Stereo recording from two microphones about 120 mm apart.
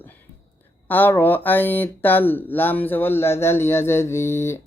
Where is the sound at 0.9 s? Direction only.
15° left (ahead or behind).